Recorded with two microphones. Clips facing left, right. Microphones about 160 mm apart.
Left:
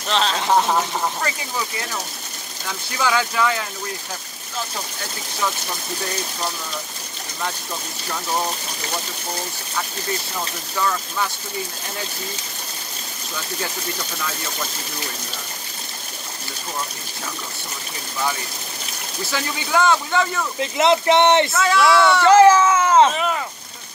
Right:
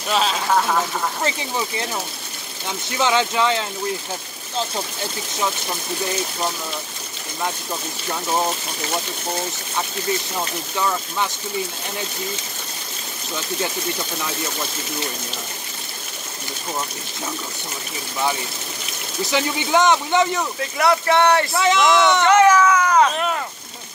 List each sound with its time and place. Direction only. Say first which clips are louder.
0.1 s speech: right 1 dB; 5° right (ahead or behind)
0.5 s speech: left 3 dB; 20° left (ahead or behind)
1.2 s speech: right 3 dB; 25° right (ahead or behind)
3.0 s speech: right 1 dB; 25° right (ahead or behind)
10.8 s speech: even; 20° right (ahead or behind)
19.3 s speech: right 3 dB; 20° right (ahead or behind)
20.7 s speech: left 2 dB; 20° left (ahead or behind)
21.5 s speech: even; 20° right (ahead or behind)
22.2 s speech: left 4 dB; 30° left (ahead or behind)
23.1 s speech: even; centre (ahead or behind)